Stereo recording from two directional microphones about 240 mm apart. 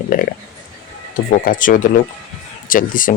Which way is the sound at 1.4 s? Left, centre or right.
Left.